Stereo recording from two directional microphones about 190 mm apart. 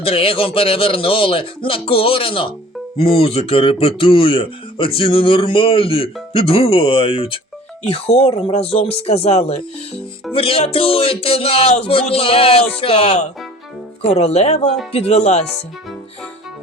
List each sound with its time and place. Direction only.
0.0 s speech: 30° left (ahead or behind)